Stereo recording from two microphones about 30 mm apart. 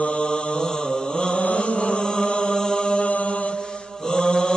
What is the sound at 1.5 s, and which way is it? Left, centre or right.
Mantra, left.